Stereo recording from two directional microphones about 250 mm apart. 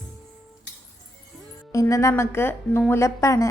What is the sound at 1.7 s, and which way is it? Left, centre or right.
A woman's voice, centre.